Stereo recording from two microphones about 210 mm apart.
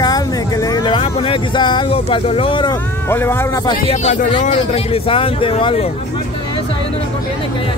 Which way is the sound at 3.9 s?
30° left (ahead or behind).